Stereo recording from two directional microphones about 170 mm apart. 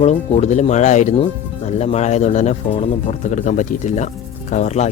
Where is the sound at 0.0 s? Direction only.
40° left (ahead or behind).